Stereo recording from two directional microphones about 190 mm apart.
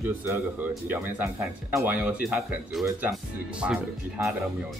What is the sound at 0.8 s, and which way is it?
Speech, 10° right (ahead or behind).